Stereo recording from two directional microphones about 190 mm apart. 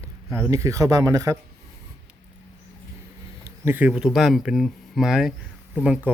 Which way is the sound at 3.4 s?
10° right (ahead or behind).